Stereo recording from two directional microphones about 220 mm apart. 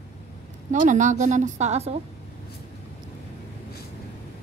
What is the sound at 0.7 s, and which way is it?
A woman's voice, 35° right (ahead or behind).